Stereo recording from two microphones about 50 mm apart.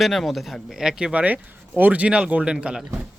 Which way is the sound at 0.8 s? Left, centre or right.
Centre.